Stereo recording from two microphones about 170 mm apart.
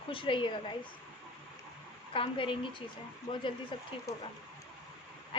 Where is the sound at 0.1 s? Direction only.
30° left (ahead or behind).